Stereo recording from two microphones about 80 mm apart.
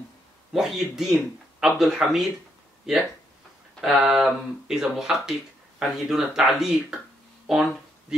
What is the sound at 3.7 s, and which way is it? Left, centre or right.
Speech, centre.